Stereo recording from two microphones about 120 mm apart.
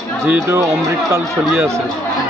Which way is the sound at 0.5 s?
25° right (ahead or behind).